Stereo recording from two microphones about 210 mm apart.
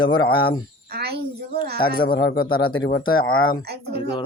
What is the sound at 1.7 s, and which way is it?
Speech, 25° left (ahead or behind).